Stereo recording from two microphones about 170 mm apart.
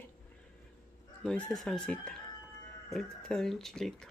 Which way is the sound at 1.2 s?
5° left (ahead or behind).